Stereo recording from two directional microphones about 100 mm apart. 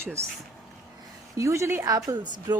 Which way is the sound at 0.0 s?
25° right (ahead or behind).